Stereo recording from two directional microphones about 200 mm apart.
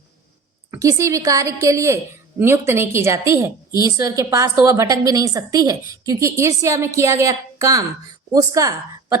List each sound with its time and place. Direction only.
0.7 s a woman's voice: 15° right (ahead or behind)